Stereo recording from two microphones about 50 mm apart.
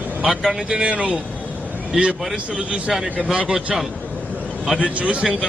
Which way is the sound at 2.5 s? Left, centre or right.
Right.